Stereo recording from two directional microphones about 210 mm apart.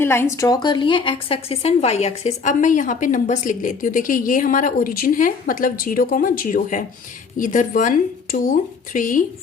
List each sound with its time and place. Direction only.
0.0 s a woman's voice: 10° left (ahead or behind); by 9.2 s 40° left (ahead or behind)